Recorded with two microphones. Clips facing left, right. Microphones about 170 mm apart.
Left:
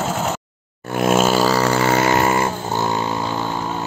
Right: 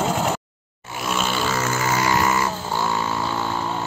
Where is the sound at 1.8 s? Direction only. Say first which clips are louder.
Left 5 dB; 60° left (ahead or behind).